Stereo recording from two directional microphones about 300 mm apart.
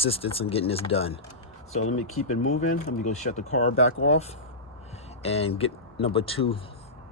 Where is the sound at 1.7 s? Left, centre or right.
Left.